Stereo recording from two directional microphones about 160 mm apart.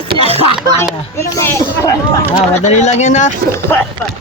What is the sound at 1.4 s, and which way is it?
Speech, 15° left (ahead or behind).